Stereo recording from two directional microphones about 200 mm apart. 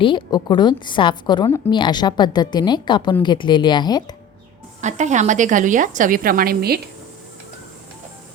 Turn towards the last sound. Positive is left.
turn(degrees=-50)  # may be behind; listen again after turning